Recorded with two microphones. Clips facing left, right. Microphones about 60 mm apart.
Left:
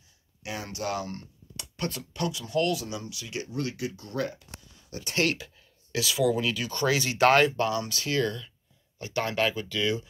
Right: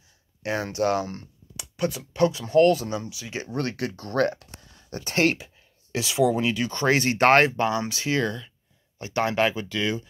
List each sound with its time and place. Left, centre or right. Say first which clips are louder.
0.4 s speech: right 9 dB; right
1.6 s a sound: right 6 dB; centre
2.1 s speech: right 10 dB; right
3.1 s speech: right 2 dB; right
3.4 s speech: right 5 dB; right
4.8 s speech: right 5 dB; right
6.7 s speech: right 4 dB; right
7.5 s speech: right 3 dB; right; by 9.9 s centre